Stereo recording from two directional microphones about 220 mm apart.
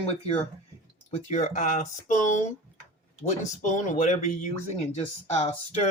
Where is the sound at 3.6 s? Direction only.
35° left (ahead or behind).